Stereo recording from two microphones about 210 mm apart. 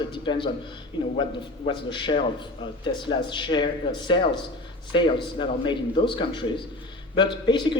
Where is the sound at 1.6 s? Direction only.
25° left (ahead or behind).